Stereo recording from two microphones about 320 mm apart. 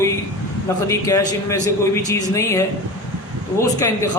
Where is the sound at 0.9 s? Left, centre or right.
Centre.